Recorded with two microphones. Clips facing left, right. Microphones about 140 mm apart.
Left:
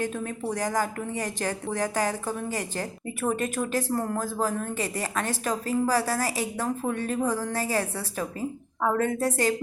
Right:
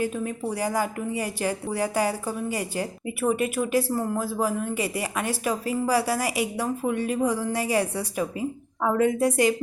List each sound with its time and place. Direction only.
0.0 s speech: 10° right (ahead or behind)